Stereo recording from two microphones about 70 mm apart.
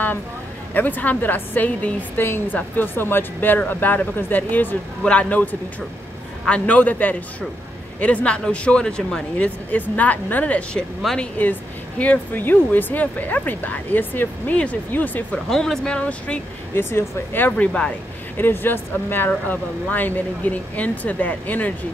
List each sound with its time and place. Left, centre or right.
0.7 s speech: left
14.5 s speech: centre
15.3 s speech: centre
16.7 s speech: left
18.4 s speech: left